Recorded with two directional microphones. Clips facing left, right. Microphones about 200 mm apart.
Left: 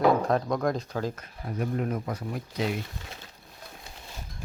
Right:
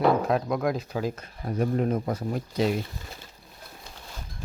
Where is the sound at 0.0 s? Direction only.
Centre (ahead or behind).